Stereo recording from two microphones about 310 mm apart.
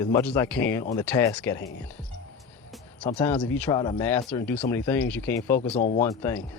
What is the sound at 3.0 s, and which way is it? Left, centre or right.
Speech, centre.